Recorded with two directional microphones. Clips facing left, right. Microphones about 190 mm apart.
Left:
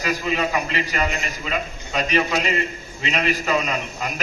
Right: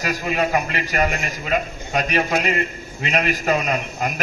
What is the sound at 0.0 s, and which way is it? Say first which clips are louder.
A man's voice: right 1 dB; 50° right (ahead or behind).